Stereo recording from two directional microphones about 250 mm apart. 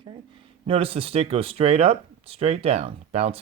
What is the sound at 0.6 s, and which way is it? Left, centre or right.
Speech, right.